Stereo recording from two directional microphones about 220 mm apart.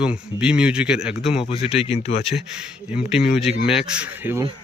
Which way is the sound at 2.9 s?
5° right (ahead or behind).